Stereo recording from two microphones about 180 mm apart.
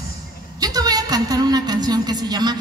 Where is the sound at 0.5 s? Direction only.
20° right (ahead or behind).